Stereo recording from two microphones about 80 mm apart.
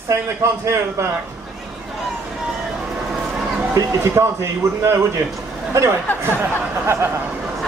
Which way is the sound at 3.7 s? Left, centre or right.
Right.